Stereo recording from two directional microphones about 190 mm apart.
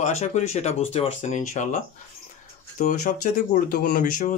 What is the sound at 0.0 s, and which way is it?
Speech, 40° left (ahead or behind).